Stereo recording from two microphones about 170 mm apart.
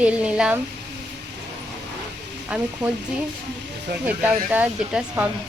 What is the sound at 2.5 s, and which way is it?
Speech, 5° right (ahead or behind).